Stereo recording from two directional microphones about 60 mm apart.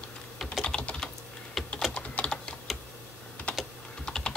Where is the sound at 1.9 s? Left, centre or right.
Left.